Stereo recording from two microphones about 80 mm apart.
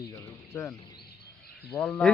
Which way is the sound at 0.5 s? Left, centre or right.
Left.